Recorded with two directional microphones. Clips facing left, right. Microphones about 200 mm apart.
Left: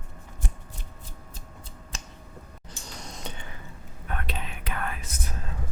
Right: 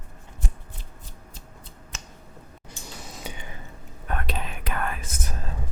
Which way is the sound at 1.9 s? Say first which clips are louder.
Left 1 dB; 35° left (ahead or behind).